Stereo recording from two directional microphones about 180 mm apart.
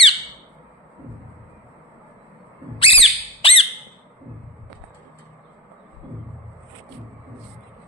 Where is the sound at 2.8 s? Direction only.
30° left (ahead or behind).